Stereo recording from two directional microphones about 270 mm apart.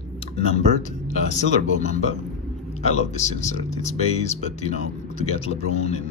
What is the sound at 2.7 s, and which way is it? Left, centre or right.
Speech, left.